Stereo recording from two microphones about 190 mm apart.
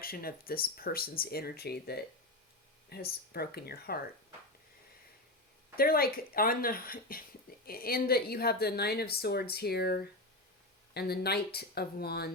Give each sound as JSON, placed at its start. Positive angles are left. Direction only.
{"t": 0.0, "sound": "speech", "side_deg": 50}
{"t": 5.7, "sound": "speech", "side_deg": 50}